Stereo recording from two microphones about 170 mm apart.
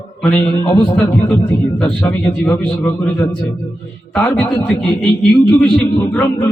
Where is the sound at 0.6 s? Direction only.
25° left (ahead or behind).